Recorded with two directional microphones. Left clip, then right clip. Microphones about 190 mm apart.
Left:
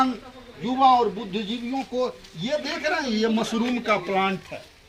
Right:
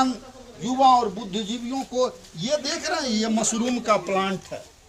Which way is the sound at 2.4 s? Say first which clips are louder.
Even; 15° right (ahead or behind).